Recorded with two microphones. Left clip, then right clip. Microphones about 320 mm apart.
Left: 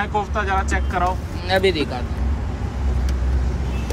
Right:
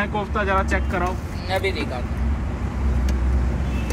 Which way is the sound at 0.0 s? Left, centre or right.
Centre.